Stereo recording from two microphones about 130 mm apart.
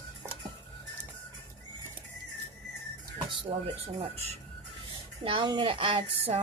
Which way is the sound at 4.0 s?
55° right (ahead or behind).